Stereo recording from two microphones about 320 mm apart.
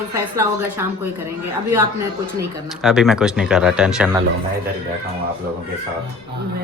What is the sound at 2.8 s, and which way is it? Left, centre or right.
A man's voice, centre.